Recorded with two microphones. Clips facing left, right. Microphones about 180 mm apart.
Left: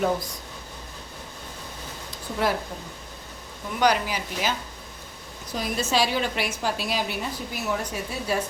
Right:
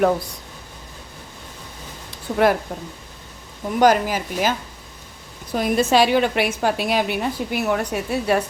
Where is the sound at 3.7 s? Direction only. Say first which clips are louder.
Right 6 dB; 45° right (ahead or behind).